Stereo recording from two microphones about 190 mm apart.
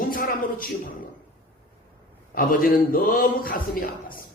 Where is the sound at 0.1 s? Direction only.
45° left (ahead or behind).